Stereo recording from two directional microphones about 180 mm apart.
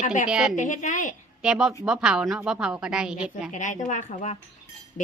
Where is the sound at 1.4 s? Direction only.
5° right (ahead or behind).